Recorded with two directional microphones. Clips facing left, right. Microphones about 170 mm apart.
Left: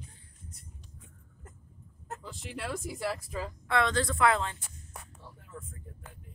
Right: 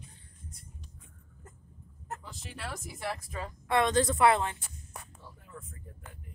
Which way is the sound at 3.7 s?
20° right (ahead or behind).